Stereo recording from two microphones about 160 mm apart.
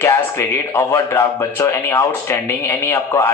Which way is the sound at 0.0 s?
15° left (ahead or behind).